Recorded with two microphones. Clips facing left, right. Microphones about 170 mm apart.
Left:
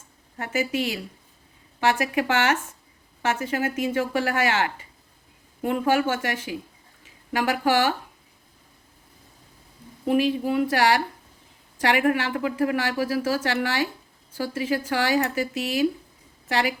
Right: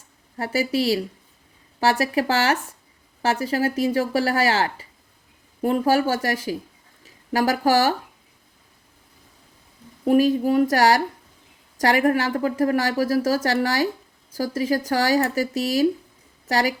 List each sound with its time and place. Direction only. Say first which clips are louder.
0.3 s a woman's voice: right 3 dB; 35° right (ahead or behind)
10.1 s a woman's voice: right 4 dB; 40° right (ahead or behind)